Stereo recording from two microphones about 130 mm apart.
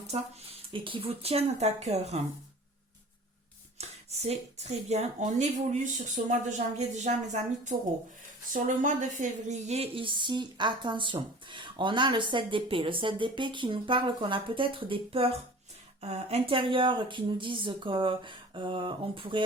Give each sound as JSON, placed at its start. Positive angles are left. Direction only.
{"t": 0.1, "sound": "speech", "side_deg": -45}
{"t": 3.8, "sound": "speech", "side_deg": -55}
{"t": 8.5, "sound": "speech", "side_deg": -90}